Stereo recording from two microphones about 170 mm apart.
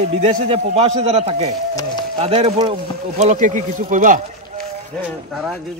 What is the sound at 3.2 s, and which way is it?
Speech, 45° right (ahead or behind).